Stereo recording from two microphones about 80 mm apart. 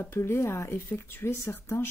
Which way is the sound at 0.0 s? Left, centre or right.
Left.